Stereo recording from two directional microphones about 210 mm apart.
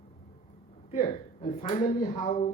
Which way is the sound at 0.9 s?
35° left (ahead or behind).